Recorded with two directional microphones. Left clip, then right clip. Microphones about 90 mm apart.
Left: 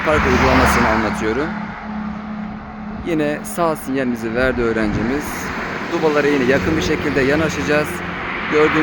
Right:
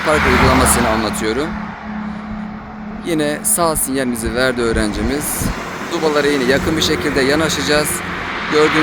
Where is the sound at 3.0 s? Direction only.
20° right (ahead or behind).